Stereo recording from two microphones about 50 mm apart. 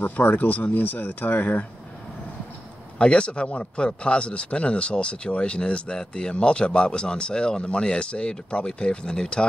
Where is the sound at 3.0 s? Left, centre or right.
Left.